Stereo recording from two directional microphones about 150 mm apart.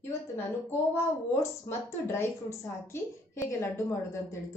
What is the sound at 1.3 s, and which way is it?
A woman's voice, 15° left (ahead or behind).